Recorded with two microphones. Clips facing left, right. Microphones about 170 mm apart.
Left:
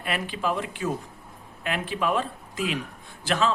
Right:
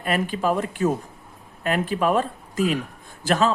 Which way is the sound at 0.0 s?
45° right (ahead or behind).